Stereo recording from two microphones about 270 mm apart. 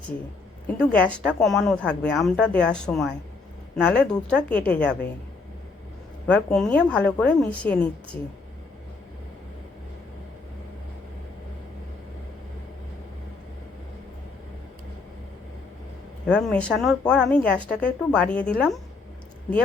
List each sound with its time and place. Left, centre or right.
0.8 s speech: centre
6.2 s speech: centre
16.2 s speech: centre